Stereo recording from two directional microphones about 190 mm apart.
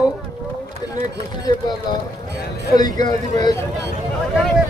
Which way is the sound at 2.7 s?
20° left (ahead or behind).